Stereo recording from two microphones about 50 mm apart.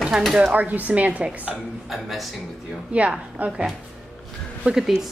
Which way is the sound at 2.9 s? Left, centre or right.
Right.